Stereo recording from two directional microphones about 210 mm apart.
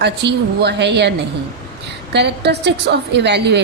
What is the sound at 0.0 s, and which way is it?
A woman's voice, 55° right (ahead or behind).